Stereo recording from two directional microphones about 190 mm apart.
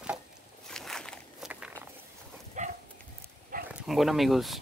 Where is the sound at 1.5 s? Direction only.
10° right (ahead or behind).